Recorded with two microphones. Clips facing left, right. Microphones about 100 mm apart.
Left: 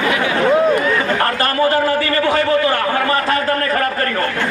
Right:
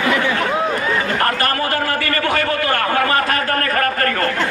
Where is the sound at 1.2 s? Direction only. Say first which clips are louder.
Left 3 dB; 25° left (ahead or behind).